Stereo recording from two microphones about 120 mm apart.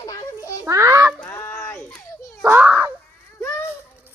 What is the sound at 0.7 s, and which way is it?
Speech, 25° right (ahead or behind).